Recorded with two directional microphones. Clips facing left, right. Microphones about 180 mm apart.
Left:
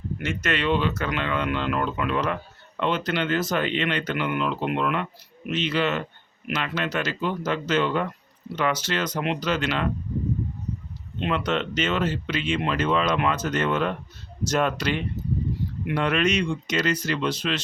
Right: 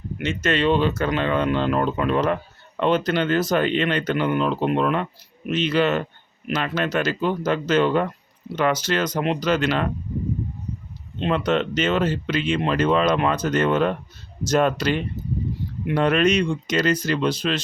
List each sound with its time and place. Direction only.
0.2 s speech: 25° right (ahead or behind); by 9.9 s 40° right (ahead or behind)
11.2 s speech: 40° right (ahead or behind)